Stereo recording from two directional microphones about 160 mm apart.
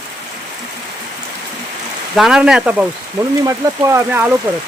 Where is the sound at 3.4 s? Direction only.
20° right (ahead or behind).